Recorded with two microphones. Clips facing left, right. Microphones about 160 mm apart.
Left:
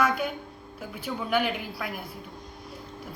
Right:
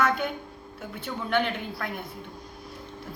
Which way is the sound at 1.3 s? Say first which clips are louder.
Even; 10° left (ahead or behind).